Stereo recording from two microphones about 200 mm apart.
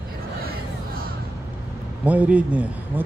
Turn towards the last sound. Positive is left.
turn(degrees=-5)  # may be behind; listen again after turning